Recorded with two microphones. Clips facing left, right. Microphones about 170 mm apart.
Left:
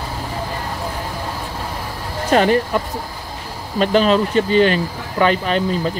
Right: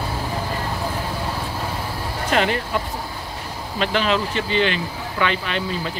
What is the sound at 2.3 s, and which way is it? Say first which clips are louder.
Speech: left 6 dB; 40° left (ahead or behind).